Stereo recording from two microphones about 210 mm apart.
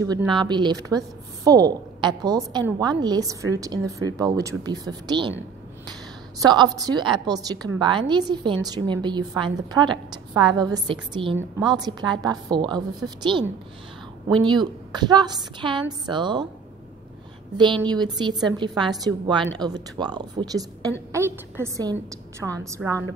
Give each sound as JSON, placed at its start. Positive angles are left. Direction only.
{"t": 0.0, "sound": "a woman's voice", "side_deg": -15}
{"t": 6.4, "sound": "a woman's voice", "side_deg": -20}
{"t": 17.8, "sound": "a woman's voice", "side_deg": -20}